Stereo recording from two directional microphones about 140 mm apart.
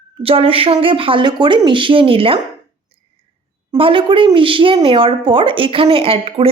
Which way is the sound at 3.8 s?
40° right (ahead or behind).